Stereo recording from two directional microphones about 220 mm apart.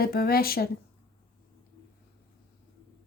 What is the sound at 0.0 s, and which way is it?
Speech, 45° left (ahead or behind).